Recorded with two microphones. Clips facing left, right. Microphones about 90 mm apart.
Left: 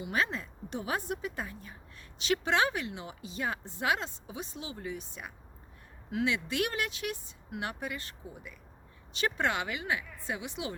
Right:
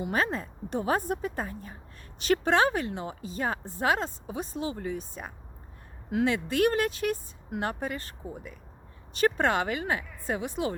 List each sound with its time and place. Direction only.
0.0 s speech: 45° right (ahead or behind)